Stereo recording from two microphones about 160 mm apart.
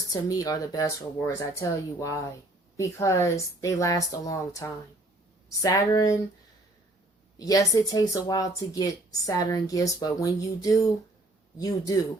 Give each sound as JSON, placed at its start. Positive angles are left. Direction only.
{"t": 0.1, "sound": "speech", "side_deg": 20}
{"t": 7.3, "sound": "speech", "side_deg": 20}